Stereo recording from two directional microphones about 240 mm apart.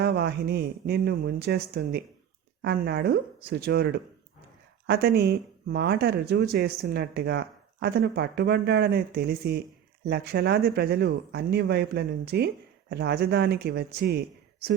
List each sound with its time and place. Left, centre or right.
0.0 s speech: right